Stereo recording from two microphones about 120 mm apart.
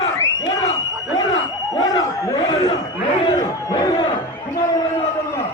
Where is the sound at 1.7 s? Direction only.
35° left (ahead or behind).